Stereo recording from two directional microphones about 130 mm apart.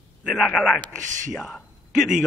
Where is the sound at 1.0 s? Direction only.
75° right (ahead or behind).